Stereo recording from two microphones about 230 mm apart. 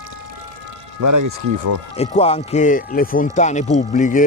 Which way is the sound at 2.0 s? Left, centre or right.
Left.